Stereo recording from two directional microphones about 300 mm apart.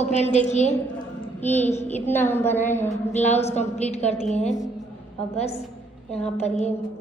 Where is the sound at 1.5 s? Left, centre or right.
Left.